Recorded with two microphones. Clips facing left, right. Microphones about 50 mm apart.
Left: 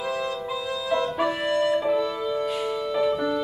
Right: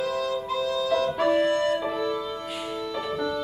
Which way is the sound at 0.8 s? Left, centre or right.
Left.